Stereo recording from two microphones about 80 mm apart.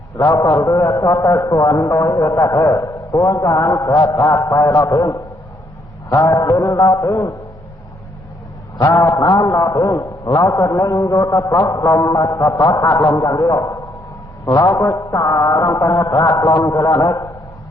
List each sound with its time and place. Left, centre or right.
0.2 s a man's voice: left
9.0 s a sound: left
9.6 s a man's voice: left
11.7 s a man's voice: left
13.6 s a sound: left
15.2 s a man's voice: left